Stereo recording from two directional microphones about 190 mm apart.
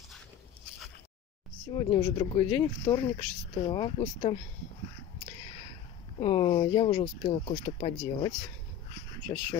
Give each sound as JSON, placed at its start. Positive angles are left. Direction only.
{"t": 1.7, "sound": "speech", "side_deg": 25}
{"t": 6.1, "sound": "speech", "side_deg": 30}